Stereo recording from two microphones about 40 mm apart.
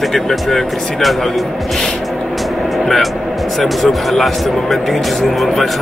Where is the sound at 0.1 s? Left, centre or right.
Centre.